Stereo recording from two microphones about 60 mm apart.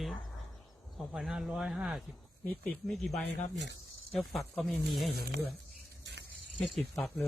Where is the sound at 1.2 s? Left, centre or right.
Centre.